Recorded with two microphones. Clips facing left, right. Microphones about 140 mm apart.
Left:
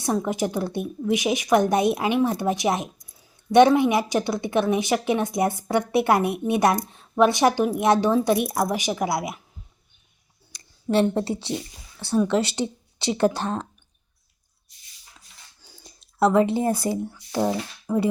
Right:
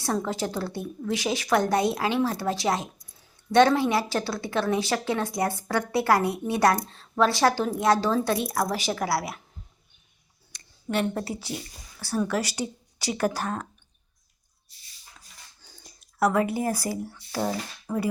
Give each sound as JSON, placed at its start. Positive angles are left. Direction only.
{"t": 0.0, "sound": "a woman's voice", "side_deg": 15}
{"t": 10.5, "sound": "a sound", "side_deg": 30}
{"t": 11.1, "sound": "speech", "side_deg": 25}
{"t": 15.6, "sound": "a sound", "side_deg": 10}
{"t": 16.0, "sound": "speech", "side_deg": 25}
{"t": 17.9, "sound": "speech", "side_deg": 0}